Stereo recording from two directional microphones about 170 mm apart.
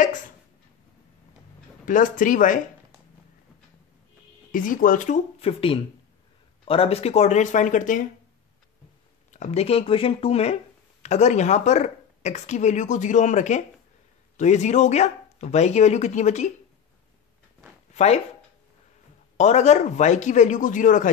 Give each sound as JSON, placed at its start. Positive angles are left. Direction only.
{"t": 1.9, "sound": "speech", "side_deg": 50}
{"t": 4.5, "sound": "speech", "side_deg": 50}
{"t": 9.3, "sound": "speech", "side_deg": 40}
{"t": 17.9, "sound": "speech", "side_deg": 40}
{"t": 19.3, "sound": "speech", "side_deg": 40}